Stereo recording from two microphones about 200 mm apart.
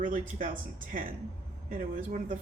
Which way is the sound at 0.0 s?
40° right (ahead or behind).